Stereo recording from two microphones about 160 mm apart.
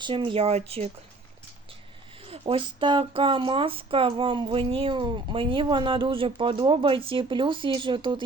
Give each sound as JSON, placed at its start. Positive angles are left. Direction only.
{"t": 0.0, "sound": "speech", "side_deg": -30}
{"t": 2.2, "sound": "speech", "side_deg": -35}